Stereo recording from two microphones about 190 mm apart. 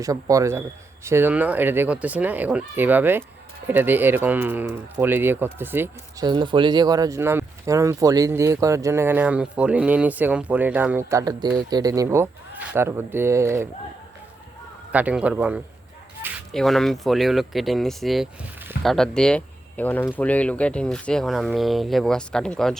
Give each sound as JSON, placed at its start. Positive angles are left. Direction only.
{"t": 0.0, "sound": "speech", "side_deg": -15}
{"t": 6.2, "sound": "speech", "side_deg": -25}
{"t": 14.9, "sound": "speech", "side_deg": -5}